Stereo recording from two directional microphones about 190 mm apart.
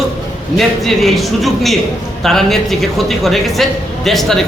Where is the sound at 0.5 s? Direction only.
Centre (ahead or behind).